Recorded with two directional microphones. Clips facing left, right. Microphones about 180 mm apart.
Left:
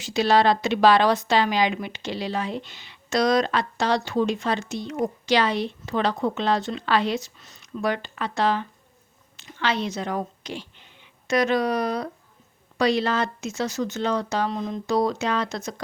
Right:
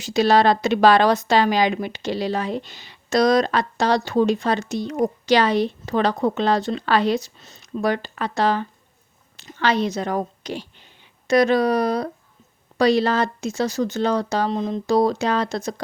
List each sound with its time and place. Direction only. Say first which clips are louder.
0.0 s a woman's voice: right 3 dB; 40° right (ahead or behind)